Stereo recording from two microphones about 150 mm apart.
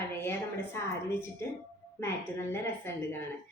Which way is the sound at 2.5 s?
15° left (ahead or behind).